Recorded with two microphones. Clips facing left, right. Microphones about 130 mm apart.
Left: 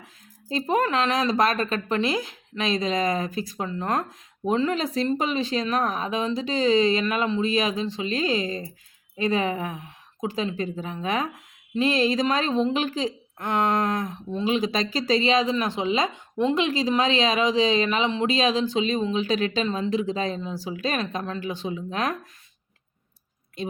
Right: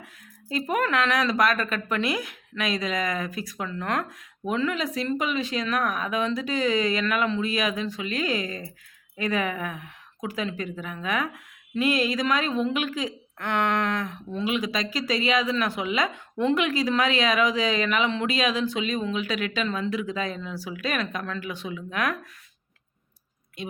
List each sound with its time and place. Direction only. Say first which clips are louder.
0.5 s speech: left 2 dB; 25° left (ahead or behind)
14.4 s speech: left 3 dB; 30° left (ahead or behind)
19.6 s speech: left 3 dB; 20° left (ahead or behind)